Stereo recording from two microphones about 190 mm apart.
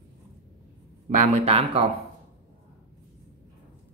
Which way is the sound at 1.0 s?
35° right (ahead or behind).